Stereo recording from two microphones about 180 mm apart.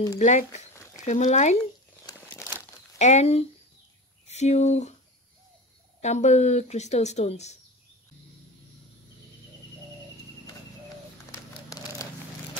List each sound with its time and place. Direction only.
0.2 s speech: 40° left (ahead or behind)
2.2 s crumpling: 15° left (ahead or behind)
3.0 s speech: 40° left (ahead or behind)
5.9 s speech: 40° left (ahead or behind)
11.3 s a sound: 20° left (ahead or behind)